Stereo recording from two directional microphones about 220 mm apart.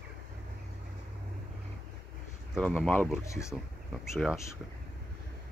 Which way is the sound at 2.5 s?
5° left (ahead or behind).